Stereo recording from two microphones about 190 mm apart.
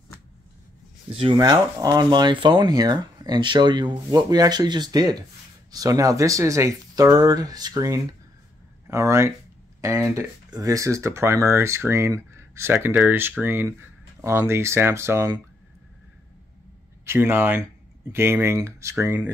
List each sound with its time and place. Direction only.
1.1 s speech: 25° right (ahead or behind)
17.0 s speech: 15° right (ahead or behind)